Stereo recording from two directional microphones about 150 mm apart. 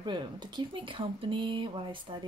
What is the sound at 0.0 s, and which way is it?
Speech, 30° right (ahead or behind).